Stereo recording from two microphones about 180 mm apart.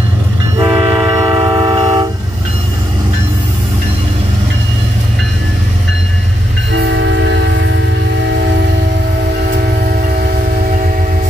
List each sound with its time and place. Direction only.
0.6 s train: 25° right (ahead or behind)
6.7 s train: 80° right
9.5 s train: 55° right (ahead or behind)